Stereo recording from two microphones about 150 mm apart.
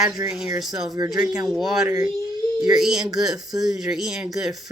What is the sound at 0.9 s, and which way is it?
Speech, 25° right (ahead or behind).